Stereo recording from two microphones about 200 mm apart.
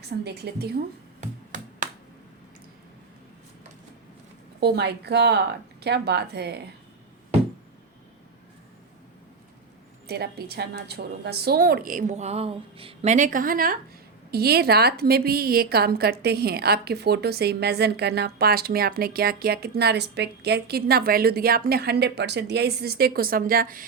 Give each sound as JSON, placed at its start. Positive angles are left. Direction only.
{"t": 0.1, "sound": "a woman's voice", "side_deg": -55}
{"t": 1.2, "sound": "a sound", "side_deg": -40}
{"t": 4.6, "sound": "speech", "side_deg": -55}
{"t": 10.1, "sound": "a woman's voice", "side_deg": -50}